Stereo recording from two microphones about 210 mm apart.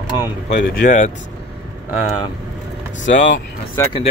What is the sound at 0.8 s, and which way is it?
Speech, 35° left (ahead or behind).